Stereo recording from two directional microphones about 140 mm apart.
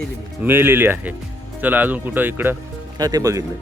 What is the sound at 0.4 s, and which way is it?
Speech, 15° right (ahead or behind).